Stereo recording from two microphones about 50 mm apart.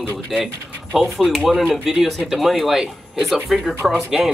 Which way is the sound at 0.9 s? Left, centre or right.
Centre.